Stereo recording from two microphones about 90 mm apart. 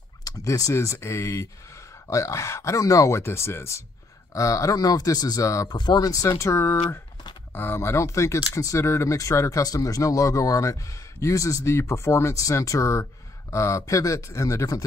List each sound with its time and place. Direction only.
0.2 s a sound: 40° left (ahead or behind)
0.9 s speech: 30° left (ahead or behind)
5.8 s speech: 50° left (ahead or behind)